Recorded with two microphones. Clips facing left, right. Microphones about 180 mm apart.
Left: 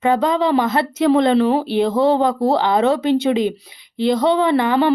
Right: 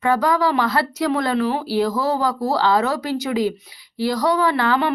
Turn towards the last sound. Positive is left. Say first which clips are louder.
# left 4 dB
turn(degrees=20)  # may be behind; listen again after turning